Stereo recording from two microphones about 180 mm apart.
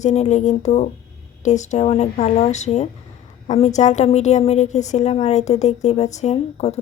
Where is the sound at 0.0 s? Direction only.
40° left (ahead or behind).